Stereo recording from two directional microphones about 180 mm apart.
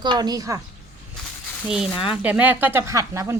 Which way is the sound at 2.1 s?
10° right (ahead or behind).